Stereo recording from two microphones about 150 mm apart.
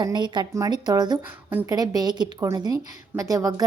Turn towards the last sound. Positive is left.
turn(degrees=-20)  # may be behind; listen again after turning